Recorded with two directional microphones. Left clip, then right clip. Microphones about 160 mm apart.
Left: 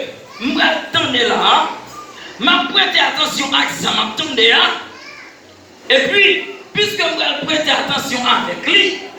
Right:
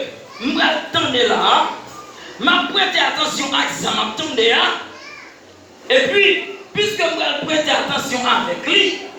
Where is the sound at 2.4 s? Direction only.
40° right (ahead or behind).